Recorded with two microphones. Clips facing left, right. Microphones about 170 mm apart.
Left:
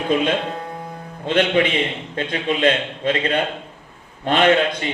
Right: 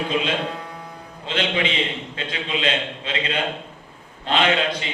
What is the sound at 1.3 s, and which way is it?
A man's voice, 50° left (ahead or behind).